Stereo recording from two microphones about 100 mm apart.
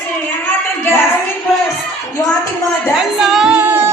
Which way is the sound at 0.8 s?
25° left (ahead or behind).